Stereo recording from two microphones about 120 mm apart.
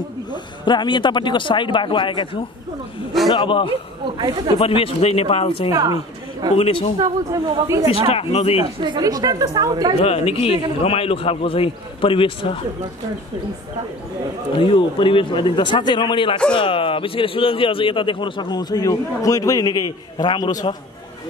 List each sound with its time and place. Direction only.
0.3 s speech: 40° left (ahead or behind)
3.3 s a man's voice: 45° left (ahead or behind)
5.7 s speech: 30° right (ahead or behind)
6.5 s speech: 55° left (ahead or behind)
7.0 s speech: 30° right (ahead or behind)
8.1 s speech: 55° left (ahead or behind)
8.8 s a woman's voice: 35° right (ahead or behind)
9.9 s a man's voice: 55° left (ahead or behind)
14.6 s a man's voice: 45° left (ahead or behind)